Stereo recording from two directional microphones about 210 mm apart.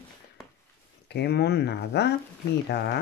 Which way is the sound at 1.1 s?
50° left (ahead or behind).